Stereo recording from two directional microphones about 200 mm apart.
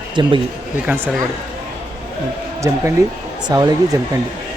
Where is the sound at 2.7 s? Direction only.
15° right (ahead or behind).